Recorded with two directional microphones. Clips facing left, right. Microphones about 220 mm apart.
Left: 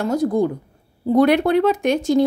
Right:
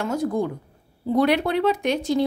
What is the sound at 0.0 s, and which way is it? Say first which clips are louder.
Speech: left 5 dB; 35° left (ahead or behind).